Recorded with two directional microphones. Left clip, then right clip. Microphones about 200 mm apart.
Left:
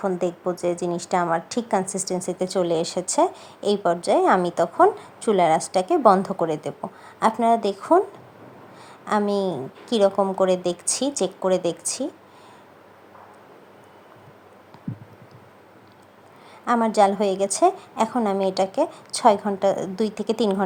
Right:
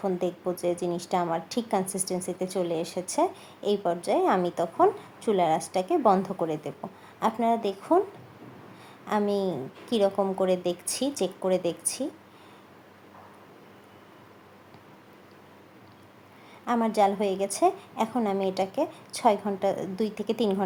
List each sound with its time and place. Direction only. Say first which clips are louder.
0.0 s a woman's voice: left 4 dB; 15° left (ahead or behind)
9.0 s a woman's voice: left 4 dB; 15° left (ahead or behind)
16.6 s a woman's voice: left 5 dB; 20° left (ahead or behind)